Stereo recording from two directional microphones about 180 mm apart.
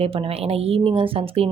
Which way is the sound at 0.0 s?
30° right (ahead or behind).